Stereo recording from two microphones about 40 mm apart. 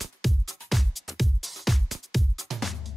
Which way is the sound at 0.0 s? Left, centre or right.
Centre.